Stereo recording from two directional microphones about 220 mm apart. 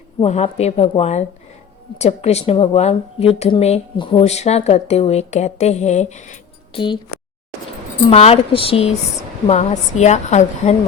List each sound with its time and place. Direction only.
0.2 s speech: 25° left (ahead or behind)
6.7 s speech: 20° left (ahead or behind)
8.1 s a woman's voice: 25° left (ahead or behind)